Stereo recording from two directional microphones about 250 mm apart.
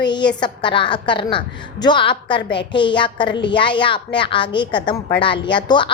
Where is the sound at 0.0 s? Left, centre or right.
Centre.